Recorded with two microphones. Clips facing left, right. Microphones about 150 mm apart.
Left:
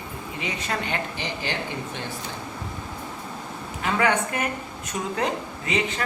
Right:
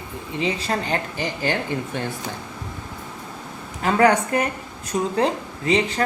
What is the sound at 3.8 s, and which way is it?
Speech, 40° right (ahead or behind).